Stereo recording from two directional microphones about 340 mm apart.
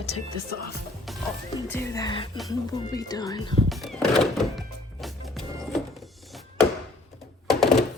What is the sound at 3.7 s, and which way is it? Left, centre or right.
Music, centre.